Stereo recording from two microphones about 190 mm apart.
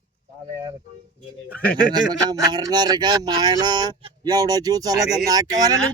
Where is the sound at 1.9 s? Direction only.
20° right (ahead or behind).